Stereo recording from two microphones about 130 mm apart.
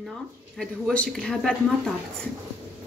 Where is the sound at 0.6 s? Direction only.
5° left (ahead or behind).